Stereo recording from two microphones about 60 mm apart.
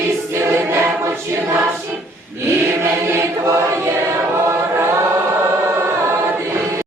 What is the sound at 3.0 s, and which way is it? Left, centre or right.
Choir, right.